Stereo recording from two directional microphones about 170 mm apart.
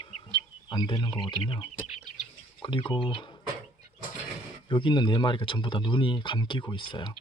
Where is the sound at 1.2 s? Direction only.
30° left (ahead or behind).